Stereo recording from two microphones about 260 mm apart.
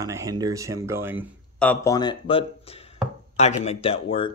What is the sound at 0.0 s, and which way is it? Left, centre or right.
Speech, centre.